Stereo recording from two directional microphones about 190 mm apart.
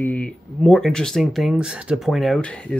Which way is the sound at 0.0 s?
5° left (ahead or behind).